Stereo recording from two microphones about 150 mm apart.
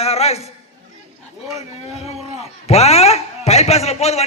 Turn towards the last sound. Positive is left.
turn(degrees=45)  # may be behind; listen again after turning